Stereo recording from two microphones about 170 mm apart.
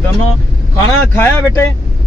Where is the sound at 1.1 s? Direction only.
10° left (ahead or behind).